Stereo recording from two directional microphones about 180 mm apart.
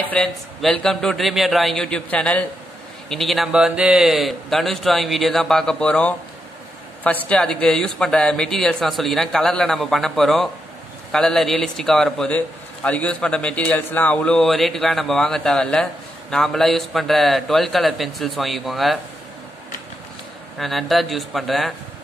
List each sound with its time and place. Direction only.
0.1 s a man's voice: 5° left (ahead or behind)
20.5 s a man's voice: centre (ahead or behind)